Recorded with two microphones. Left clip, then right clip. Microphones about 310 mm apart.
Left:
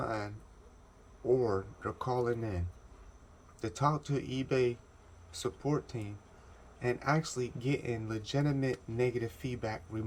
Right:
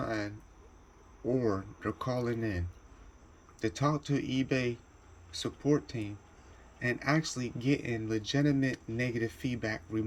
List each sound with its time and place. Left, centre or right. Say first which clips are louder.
0.0 s cricket: right 1 dB; centre
1.8 s speech: even; centre